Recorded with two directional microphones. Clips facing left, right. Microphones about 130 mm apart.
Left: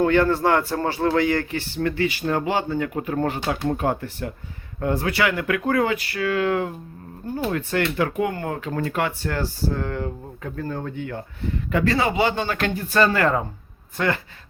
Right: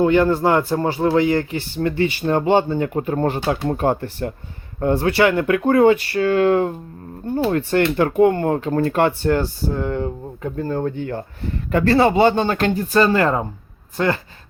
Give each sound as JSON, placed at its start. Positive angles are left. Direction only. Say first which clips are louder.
{"t": 0.0, "sound": "speech", "louder": "right 3 dB", "side_deg": -20}